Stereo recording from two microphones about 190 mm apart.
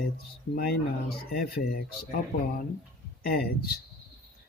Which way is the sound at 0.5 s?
55° left (ahead or behind).